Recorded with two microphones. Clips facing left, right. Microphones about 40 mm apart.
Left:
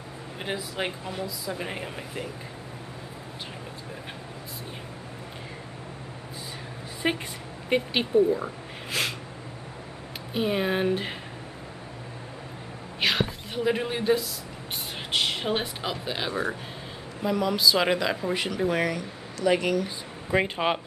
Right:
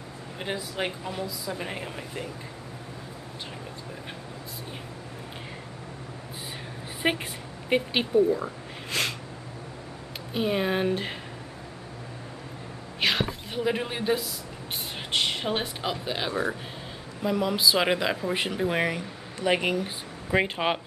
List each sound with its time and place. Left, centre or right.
0.4 s speech: centre
7.0 s speech: centre
7.7 s speech: centre
10.3 s speech: centre
13.0 s speech: centre
16.3 s speech: left
17.2 s speech: centre
18.3 s speech: right
20.2 s speech: centre